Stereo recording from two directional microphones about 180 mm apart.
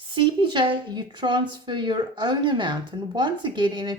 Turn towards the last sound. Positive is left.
turn(degrees=-25)  # may be behind; listen again after turning